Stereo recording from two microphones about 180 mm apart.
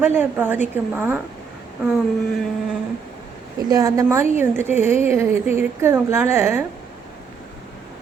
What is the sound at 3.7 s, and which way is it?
A woman's voice, 20° right (ahead or behind).